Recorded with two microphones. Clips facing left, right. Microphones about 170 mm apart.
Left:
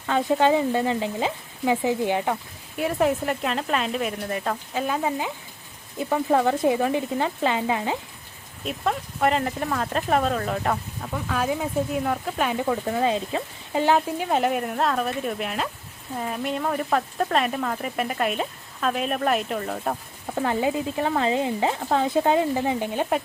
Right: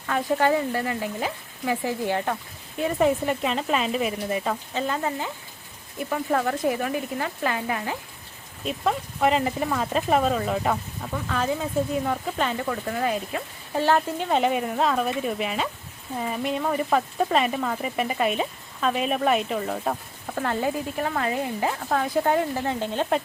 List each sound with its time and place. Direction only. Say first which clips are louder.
0.1 s speech: left 2 dB; 20° left (ahead or behind)
2.7 s speech: right 1 dB; centre (ahead or behind)
6.0 s speech: left 4 dB; 25° left (ahead or behind)
8.6 s speech: right 1 dB; centre (ahead or behind)
12.5 s speech: left 3 dB; 15° left (ahead or behind)
14.3 s speech: right 2 dB; centre (ahead or behind)
20.3 s speech: left 2 dB; 15° left (ahead or behind)